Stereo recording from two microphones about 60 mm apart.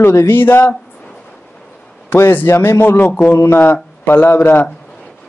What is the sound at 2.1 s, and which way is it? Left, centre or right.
A man's voice, left.